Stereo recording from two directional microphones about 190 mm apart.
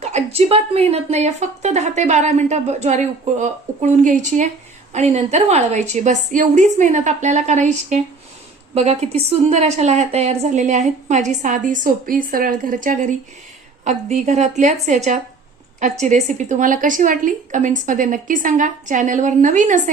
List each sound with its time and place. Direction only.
0.0 s speech: 35° right (ahead or behind)